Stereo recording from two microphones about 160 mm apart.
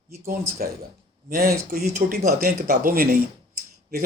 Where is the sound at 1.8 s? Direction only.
50° right (ahead or behind).